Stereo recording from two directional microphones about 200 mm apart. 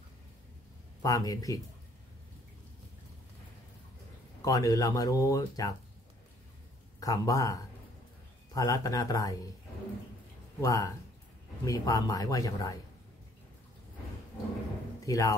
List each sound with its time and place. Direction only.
1.0 s speech: 20° left (ahead or behind)
4.4 s speech: 15° left (ahead or behind)
7.0 s speech: 15° left (ahead or behind)
10.6 s speech: 15° left (ahead or behind)
15.0 s speech: 15° left (ahead or behind)